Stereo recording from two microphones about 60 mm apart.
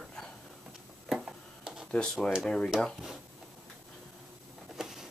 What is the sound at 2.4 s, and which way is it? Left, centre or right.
Speech, centre.